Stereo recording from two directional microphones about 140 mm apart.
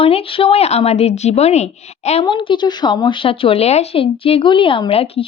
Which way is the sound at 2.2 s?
35° left (ahead or behind).